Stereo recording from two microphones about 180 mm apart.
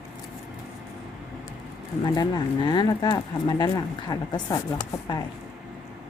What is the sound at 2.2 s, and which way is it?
Speech, 25° left (ahead or behind).